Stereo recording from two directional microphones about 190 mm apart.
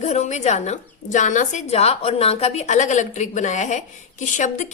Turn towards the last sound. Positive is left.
turn(degrees=40)  # may be behind; listen again after turning